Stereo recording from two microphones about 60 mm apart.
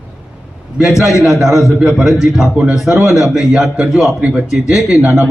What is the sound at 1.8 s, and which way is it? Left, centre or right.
A man's voice, centre.